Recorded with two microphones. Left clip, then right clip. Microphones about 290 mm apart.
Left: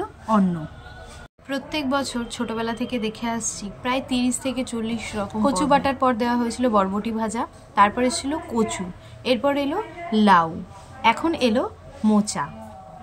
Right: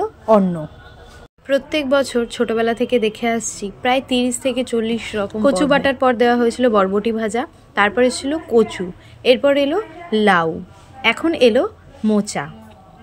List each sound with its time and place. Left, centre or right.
1.5 s a woman's voice: centre